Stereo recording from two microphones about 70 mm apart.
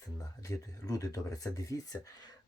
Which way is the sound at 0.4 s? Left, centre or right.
Left.